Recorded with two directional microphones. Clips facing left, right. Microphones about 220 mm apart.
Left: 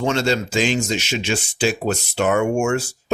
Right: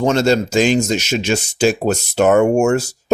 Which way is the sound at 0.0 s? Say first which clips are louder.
Right 5 dB; 45° right (ahead or behind).